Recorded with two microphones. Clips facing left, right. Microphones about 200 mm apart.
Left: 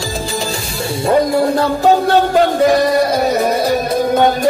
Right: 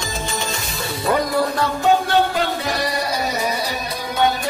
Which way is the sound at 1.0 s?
30° left (ahead or behind).